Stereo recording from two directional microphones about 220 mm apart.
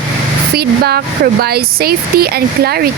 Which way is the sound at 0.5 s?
45° right (ahead or behind).